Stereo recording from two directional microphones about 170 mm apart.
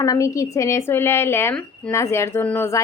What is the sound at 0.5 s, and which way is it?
A woman's voice, 15° left (ahead or behind).